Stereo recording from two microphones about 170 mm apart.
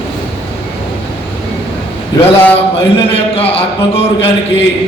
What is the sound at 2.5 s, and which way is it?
Speech, 35° left (ahead or behind).